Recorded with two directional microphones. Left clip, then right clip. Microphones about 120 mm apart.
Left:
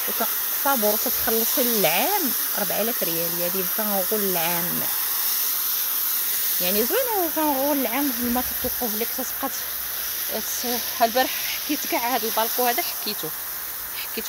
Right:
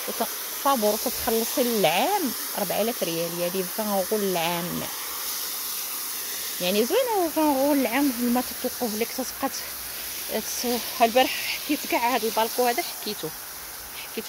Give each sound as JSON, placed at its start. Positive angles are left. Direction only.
{"t": 0.2, "sound": "speech", "side_deg": -5}
{"t": 6.6, "sound": "speech", "side_deg": -15}
{"t": 10.7, "sound": "speech", "side_deg": -25}